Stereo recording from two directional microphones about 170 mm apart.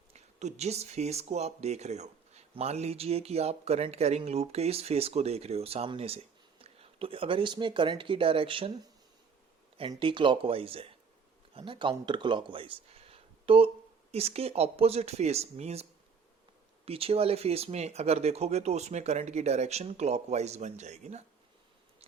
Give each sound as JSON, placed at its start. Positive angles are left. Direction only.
{"t": 0.1, "sound": "speech", "side_deg": -40}
{"t": 10.0, "sound": "speech", "side_deg": -30}